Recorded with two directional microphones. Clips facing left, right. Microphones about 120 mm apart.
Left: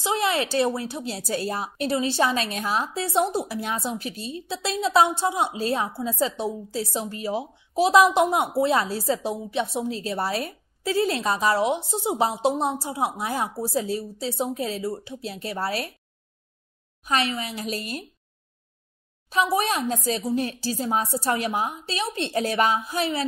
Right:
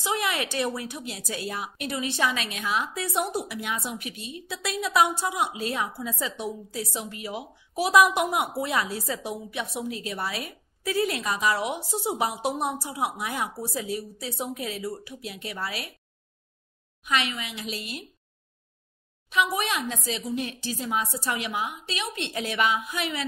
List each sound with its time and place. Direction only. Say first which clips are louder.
0.0 s a woman's voice: left 4 dB; 30° left (ahead or behind)
17.0 s a woman's voice: left 3 dB; 35° left (ahead or behind)
19.2 s a woman's voice: left 3 dB; 35° left (ahead or behind)